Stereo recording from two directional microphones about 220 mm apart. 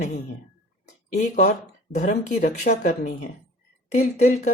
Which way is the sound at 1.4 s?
35° left (ahead or behind).